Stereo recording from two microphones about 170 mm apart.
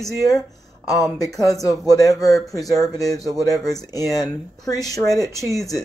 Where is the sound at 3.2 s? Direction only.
Centre (ahead or behind).